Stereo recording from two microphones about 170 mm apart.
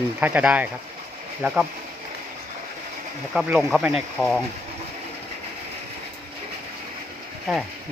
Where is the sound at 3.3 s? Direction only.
Centre (ahead or behind).